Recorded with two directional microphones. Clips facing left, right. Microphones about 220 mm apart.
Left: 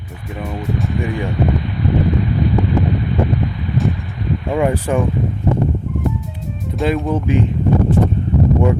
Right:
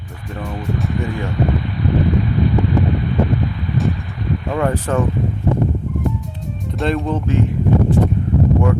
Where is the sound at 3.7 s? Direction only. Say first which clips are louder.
Left 1 dB; centre (ahead or behind).